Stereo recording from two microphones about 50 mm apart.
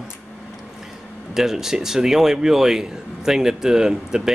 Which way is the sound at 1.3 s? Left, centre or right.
Centre.